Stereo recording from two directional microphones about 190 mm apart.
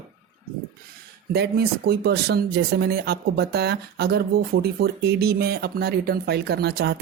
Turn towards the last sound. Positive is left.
turn(degrees=-55)  # may be behind; listen again after turning